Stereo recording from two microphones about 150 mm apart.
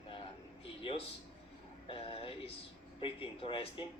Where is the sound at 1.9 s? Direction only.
40° left (ahead or behind).